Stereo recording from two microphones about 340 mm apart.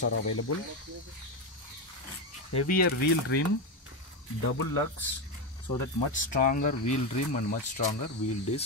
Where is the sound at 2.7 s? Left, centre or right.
Left.